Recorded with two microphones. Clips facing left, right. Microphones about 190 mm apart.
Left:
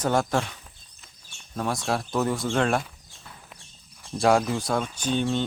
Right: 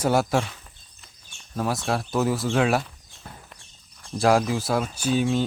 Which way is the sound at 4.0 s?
Centre (ahead or behind).